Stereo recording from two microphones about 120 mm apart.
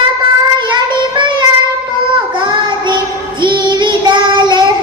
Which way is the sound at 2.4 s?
40° right (ahead or behind).